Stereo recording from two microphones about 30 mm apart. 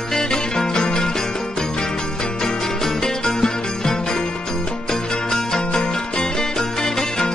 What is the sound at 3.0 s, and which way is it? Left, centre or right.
Music, left.